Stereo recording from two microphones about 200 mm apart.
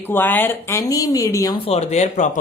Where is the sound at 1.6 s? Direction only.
30° left (ahead or behind).